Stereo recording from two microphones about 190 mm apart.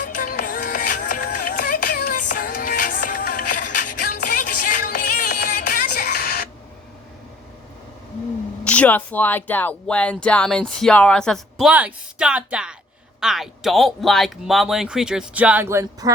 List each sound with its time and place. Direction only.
0.0 s music: 50° left (ahead or behind)
8.6 s speech: 5° left (ahead or behind); by 16.1 s 20° right (ahead or behind)